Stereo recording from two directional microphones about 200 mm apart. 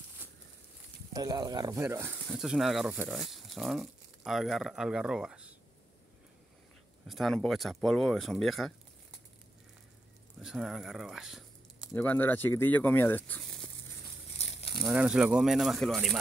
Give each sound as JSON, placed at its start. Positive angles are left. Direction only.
{"t": 1.1, "sound": "speech", "side_deg": -20}
{"t": 7.1, "sound": "speech", "side_deg": 0}
{"t": 10.4, "sound": "speech", "side_deg": 0}
{"t": 11.9, "sound": "speech", "side_deg": 10}
{"t": 14.4, "sound": "a sound", "side_deg": 30}
{"t": 14.9, "sound": "speech", "side_deg": -5}